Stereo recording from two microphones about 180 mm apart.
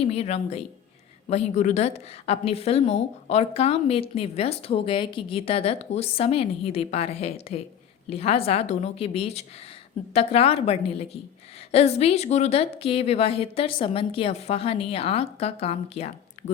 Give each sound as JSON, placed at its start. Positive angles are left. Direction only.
{"t": 0.0, "sound": "a woman's voice", "side_deg": 35}